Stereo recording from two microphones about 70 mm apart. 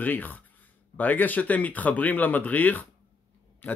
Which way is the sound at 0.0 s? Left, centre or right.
Left.